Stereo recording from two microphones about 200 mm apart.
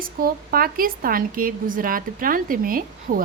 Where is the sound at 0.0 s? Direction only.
45° right (ahead or behind).